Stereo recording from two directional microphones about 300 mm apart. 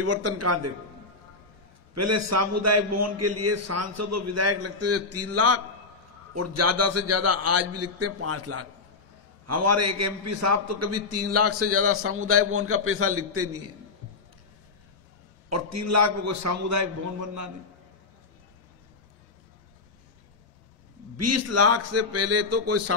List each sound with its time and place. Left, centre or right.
0.0 s a man's voice: right
2.0 s a man's voice: right
15.5 s a man's voice: right
21.2 s a man's voice: right